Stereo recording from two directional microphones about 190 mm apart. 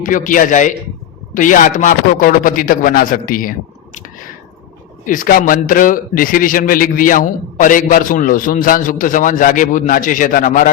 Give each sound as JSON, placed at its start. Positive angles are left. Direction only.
{"t": 0.0, "sound": "a man's voice", "side_deg": 45}
{"t": 5.0, "sound": "a man's voice", "side_deg": 45}